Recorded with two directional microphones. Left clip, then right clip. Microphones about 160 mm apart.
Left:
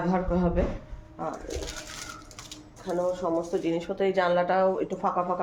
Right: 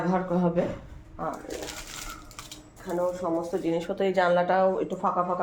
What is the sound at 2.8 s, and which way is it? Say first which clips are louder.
Speech: even; 5° left (ahead or behind).